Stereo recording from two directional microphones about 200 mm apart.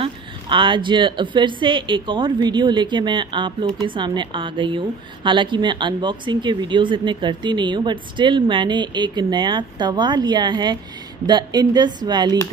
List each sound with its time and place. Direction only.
0.0 s a woman's voice: 25° right (ahead or behind)